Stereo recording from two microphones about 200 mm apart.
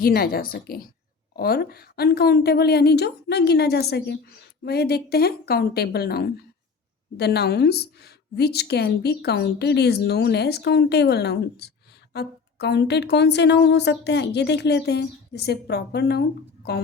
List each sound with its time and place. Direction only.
0.0 s a woman's voice: 50° left (ahead or behind)